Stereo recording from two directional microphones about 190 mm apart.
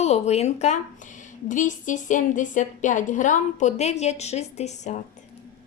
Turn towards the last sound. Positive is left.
turn(degrees=40)  # may be behind; listen again after turning